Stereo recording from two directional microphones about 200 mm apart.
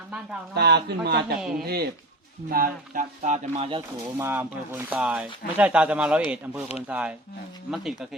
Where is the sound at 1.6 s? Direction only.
50° right (ahead or behind); by 3.8 s 30° right (ahead or behind).